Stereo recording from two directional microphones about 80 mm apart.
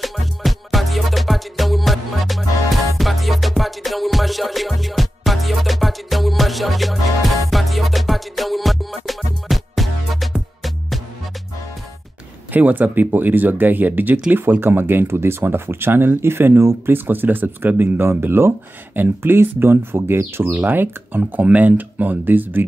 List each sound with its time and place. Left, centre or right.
0.0 s music: centre
12.5 s speech: right